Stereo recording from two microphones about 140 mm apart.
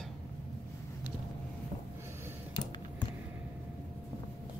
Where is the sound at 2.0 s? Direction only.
20° right (ahead or behind).